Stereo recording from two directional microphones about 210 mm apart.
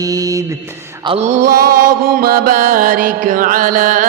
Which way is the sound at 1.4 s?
45° right (ahead or behind).